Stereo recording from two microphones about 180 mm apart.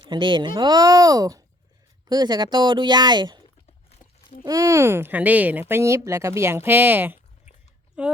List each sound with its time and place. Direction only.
0.0 s speech: 25° right (ahead or behind)
4.4 s a woman's voice: 20° right (ahead or behind)